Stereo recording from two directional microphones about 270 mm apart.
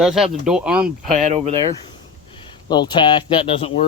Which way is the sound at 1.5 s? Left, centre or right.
Centre.